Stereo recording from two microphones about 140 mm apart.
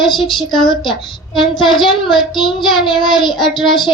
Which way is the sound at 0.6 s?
35° left (ahead or behind).